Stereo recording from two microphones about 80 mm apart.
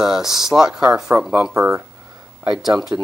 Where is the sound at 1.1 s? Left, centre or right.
Right.